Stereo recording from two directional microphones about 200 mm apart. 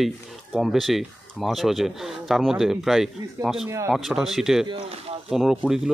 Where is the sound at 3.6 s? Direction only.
15° right (ahead or behind).